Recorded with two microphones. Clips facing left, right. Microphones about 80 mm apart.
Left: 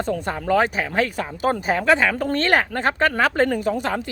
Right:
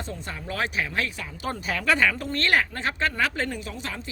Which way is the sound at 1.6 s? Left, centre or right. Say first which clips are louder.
Left 3 dB; left.